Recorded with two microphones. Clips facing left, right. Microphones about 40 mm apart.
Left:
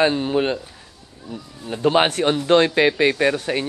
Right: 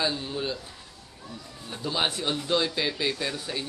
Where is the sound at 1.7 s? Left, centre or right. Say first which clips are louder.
Left 11 dB; left.